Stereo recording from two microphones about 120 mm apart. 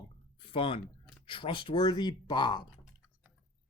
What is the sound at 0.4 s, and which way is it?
Speech, 50° left (ahead or behind).